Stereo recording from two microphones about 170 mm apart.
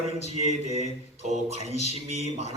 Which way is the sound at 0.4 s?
40° right (ahead or behind).